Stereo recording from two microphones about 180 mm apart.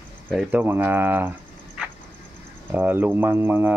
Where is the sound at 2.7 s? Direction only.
10° right (ahead or behind).